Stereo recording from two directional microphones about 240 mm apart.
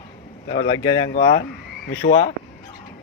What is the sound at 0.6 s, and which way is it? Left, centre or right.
Speech, left.